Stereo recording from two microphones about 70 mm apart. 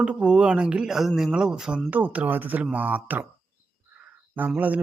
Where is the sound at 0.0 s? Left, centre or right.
Centre.